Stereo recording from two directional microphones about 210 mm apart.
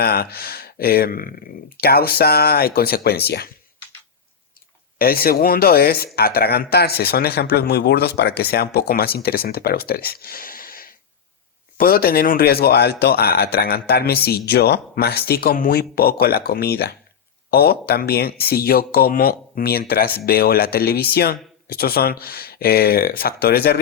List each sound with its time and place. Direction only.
0.0 s speech: 50° left (ahead or behind)
4.9 s speech: 45° left (ahead or behind)